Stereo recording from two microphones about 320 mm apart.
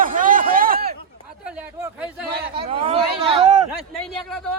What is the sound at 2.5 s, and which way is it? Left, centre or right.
Speech, centre.